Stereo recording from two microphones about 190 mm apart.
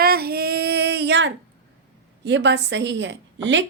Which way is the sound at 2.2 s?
65° right (ahead or behind).